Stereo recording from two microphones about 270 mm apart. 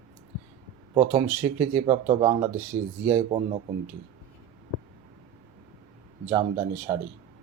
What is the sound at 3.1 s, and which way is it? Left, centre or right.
Speech, right.